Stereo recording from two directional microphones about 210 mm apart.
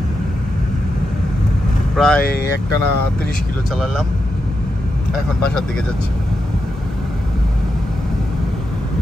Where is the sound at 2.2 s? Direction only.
50° left (ahead or behind).